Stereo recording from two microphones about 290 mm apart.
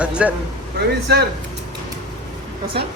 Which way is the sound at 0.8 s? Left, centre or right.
Right.